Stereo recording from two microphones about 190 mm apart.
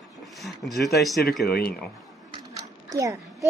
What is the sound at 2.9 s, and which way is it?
Speech, 15° right (ahead or behind).